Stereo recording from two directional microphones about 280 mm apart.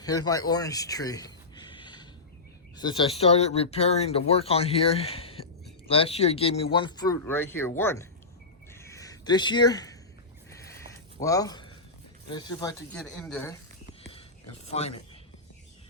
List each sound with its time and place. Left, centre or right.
0.0 s speech: centre
8.7 s a sound: centre
11.2 s speech: centre
14.0 s whispering: centre